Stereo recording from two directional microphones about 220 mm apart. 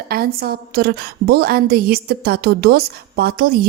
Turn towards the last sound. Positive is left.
turn(degrees=-45)  # may be behind; listen again after turning